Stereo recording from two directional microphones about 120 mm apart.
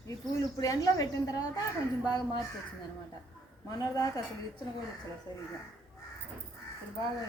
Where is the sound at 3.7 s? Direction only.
30° left (ahead or behind).